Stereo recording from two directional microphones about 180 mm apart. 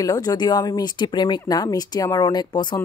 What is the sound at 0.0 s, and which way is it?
Speech, 20° left (ahead or behind).